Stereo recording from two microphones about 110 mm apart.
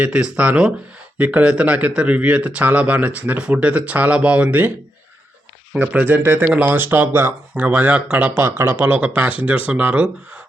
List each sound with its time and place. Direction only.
0.0 s speech: 10° right (ahead or behind)
5.7 s speech: 10° right (ahead or behind)